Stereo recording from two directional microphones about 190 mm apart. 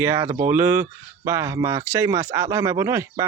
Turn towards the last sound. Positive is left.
turn(degrees=-15)  # may be behind; listen again after turning